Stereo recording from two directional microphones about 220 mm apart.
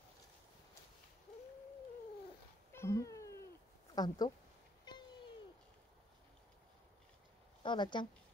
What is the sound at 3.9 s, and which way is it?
Speech, 20° left (ahead or behind).